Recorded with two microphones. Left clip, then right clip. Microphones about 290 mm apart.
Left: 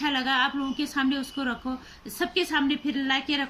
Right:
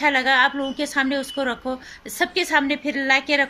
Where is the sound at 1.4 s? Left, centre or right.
Right.